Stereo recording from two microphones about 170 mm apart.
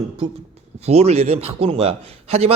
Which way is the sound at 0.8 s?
40° right (ahead or behind).